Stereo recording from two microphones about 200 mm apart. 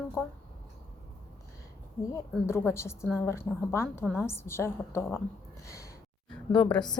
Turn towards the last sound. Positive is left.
turn(degrees=5)  # may be behind; listen again after turning